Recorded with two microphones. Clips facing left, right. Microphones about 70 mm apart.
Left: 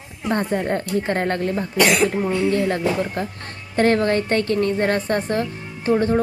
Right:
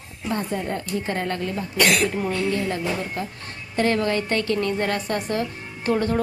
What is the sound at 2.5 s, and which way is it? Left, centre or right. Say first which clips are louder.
Speech: left 5 dB; left.